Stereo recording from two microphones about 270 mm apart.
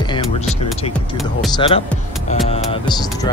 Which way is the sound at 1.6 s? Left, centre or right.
Left.